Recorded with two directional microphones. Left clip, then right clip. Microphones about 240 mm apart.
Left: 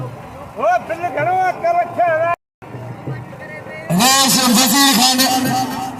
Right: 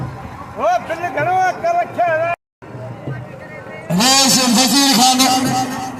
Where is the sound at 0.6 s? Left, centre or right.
Centre.